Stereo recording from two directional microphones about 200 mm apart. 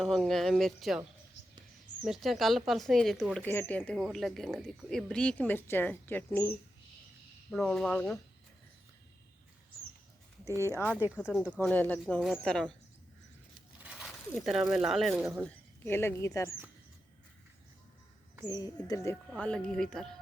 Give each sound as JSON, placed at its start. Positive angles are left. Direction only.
{"t": 0.0, "sound": "speech", "side_deg": 0}
{"t": 2.0, "sound": "speech", "side_deg": 0}
{"t": 7.5, "sound": "speech", "side_deg": 0}
{"t": 10.7, "sound": "speech", "side_deg": 10}
{"t": 11.3, "sound": "speech", "side_deg": -5}
{"t": 11.5, "sound": "speech", "side_deg": 10}
{"t": 13.8, "sound": "a sound", "side_deg": -5}
{"t": 14.3, "sound": "speech", "side_deg": 0}
{"t": 15.8, "sound": "speech", "side_deg": 10}
{"t": 18.4, "sound": "speech", "side_deg": 20}
{"t": 19.4, "sound": "speech", "side_deg": 5}